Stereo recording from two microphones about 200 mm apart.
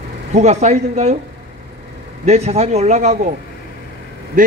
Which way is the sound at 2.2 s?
30° right (ahead or behind).